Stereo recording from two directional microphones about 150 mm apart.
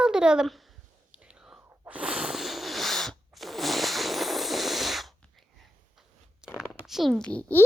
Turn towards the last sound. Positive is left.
turn(degrees=10)  # may be behind; listen again after turning